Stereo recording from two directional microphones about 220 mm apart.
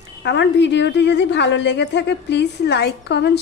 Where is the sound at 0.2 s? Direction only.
50° left (ahead or behind).